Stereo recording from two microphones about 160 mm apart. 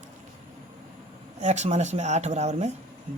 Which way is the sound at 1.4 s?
45° right (ahead or behind).